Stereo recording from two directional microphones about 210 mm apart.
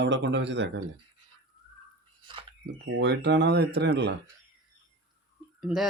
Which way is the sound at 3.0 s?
55° right (ahead or behind).